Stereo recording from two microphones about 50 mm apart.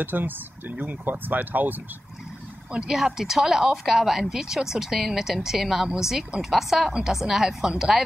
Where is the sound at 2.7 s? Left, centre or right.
Centre.